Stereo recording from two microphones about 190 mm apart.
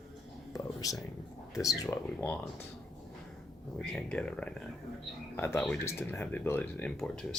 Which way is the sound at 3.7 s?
5° left (ahead or behind).